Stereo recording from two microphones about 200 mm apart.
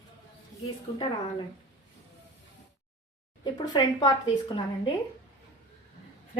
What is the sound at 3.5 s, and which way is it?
A woman's voice, 20° left (ahead or behind).